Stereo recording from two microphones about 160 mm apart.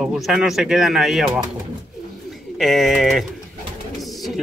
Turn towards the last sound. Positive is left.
turn(degrees=0)  # may be behind; listen again after turning